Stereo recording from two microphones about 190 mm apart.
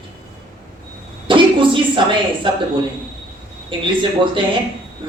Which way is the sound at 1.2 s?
25° right (ahead or behind).